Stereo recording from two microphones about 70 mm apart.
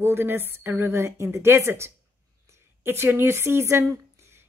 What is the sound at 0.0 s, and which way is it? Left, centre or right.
A woman's voice, right.